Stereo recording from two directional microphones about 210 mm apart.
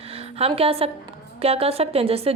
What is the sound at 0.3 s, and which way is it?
A woman's voice, 30° right (ahead or behind).